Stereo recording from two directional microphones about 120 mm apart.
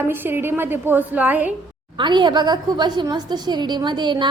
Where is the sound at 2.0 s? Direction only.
40° right (ahead or behind).